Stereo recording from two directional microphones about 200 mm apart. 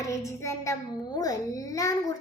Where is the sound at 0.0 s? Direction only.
15° left (ahead or behind).